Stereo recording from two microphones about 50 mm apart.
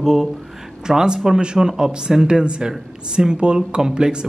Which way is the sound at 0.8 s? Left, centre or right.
Centre.